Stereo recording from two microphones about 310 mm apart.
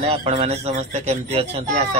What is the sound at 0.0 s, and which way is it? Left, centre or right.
Speech, centre.